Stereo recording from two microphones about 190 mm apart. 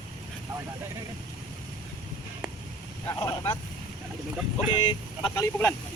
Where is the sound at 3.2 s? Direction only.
15° left (ahead or behind).